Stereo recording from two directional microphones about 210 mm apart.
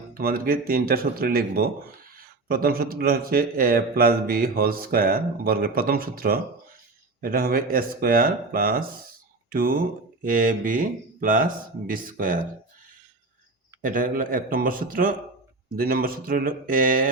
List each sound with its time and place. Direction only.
0.1 s speech: 45° right (ahead or behind)
13.8 s speech: 40° right (ahead or behind)